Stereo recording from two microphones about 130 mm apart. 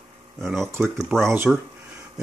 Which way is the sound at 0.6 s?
20° right (ahead or behind).